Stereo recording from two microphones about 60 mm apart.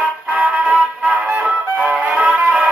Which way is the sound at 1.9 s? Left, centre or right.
Right.